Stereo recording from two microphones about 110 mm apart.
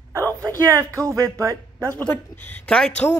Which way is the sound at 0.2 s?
15° left (ahead or behind).